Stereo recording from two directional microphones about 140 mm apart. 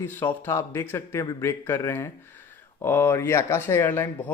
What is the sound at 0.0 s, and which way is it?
Speech, 15° left (ahead or behind).